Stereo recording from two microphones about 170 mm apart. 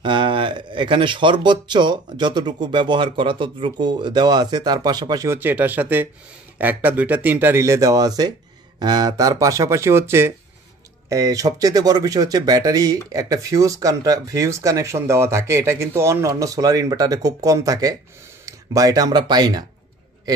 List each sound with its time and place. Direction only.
0.0 s speech: 30° right (ahead or behind)